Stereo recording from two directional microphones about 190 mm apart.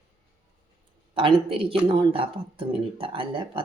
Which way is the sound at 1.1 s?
30° right (ahead or behind).